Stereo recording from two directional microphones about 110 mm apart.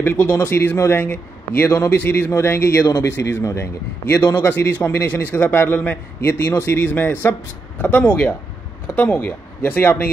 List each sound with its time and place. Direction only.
0.0 s a man's voice: 15° left (ahead or behind)